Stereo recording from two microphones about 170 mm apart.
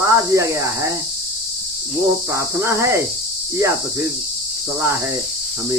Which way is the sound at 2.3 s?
15° right (ahead or behind).